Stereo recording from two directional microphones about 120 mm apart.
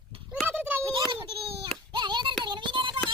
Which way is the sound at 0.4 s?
15° right (ahead or behind).